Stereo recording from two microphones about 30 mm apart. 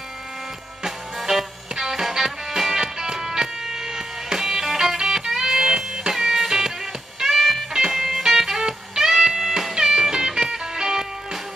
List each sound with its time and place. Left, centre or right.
1.3 s music: centre
7.7 s music: centre
8.1 s music: centre
9.8 s music: right